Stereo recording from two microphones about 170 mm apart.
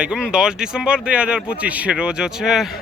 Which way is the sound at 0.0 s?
5° right (ahead or behind).